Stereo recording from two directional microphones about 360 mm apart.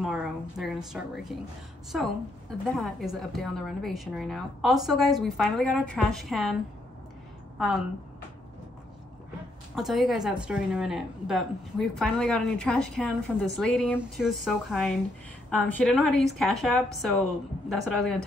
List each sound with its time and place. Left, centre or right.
0.0 s a woman's voice: centre
7.5 s a woman's voice: centre
9.8 s a woman's voice: centre